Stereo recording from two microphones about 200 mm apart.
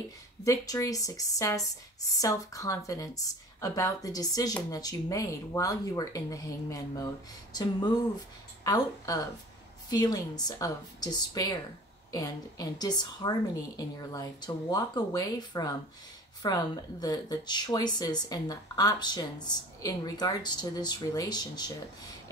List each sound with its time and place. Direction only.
0.4 s a woman's voice: 15° left (ahead or behind)